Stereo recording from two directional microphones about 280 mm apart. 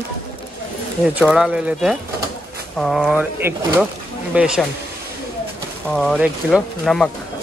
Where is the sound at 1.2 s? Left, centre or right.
Centre.